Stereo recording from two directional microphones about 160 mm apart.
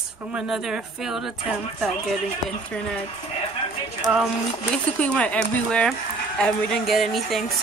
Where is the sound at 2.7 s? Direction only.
5° left (ahead or behind).